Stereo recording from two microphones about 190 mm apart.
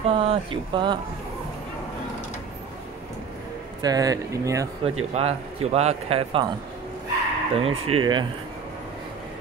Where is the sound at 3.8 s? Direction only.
20° right (ahead or behind).